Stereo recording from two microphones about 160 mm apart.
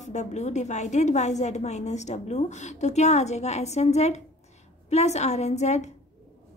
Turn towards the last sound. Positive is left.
turn(degrees=45)  # may be behind; listen again after turning